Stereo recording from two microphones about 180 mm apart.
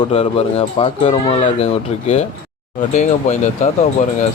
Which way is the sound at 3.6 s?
40° left (ahead or behind).